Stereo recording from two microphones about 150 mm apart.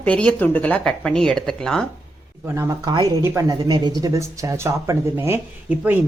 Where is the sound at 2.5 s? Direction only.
20° right (ahead or behind).